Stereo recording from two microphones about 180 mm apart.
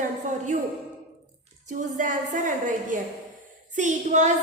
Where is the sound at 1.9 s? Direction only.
45° right (ahead or behind).